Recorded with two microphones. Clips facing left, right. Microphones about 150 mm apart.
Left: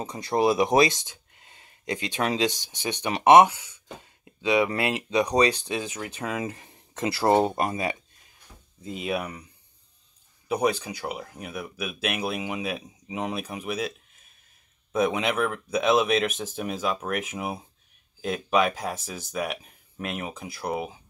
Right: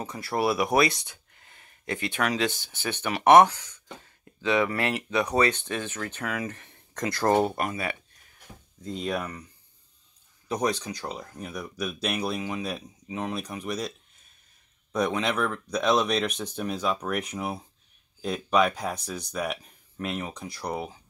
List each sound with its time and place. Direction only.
0.0 s speech: 20° left (ahead or behind)
6.2 s speech: 20° left (ahead or behind)
7.2 s speech: 10° left (ahead or behind)
8.5 s a sound: 85° right
8.8 s speech: 5° left (ahead or behind)
10.5 s speech: 10° left (ahead or behind)